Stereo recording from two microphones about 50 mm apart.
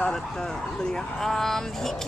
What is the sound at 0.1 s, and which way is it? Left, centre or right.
Speech, centre.